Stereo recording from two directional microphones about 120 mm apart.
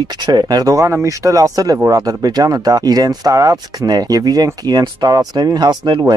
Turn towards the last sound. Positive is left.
turn(degrees=-40)  # may be behind; listen again after turning